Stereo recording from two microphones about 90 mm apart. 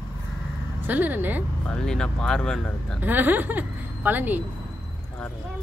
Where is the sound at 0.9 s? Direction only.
20° right (ahead or behind).